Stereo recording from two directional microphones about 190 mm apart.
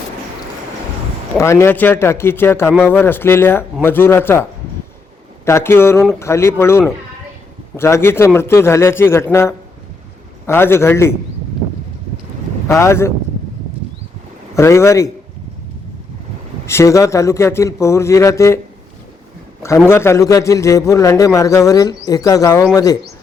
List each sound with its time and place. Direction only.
1.4 s a man's voice: 15° left (ahead or behind)
5.5 s a man's voice: 15° left (ahead or behind)
12.6 s a man's voice: 15° left (ahead or behind)
14.5 s a man's voice: 15° left (ahead or behind)
16.6 s a man's voice: 15° left (ahead or behind)
19.6 s a man's voice: 15° left (ahead or behind)